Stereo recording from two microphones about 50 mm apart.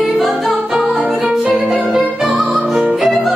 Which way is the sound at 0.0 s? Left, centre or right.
Centre.